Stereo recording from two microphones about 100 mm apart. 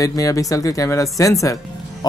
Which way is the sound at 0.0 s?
35° left (ahead or behind).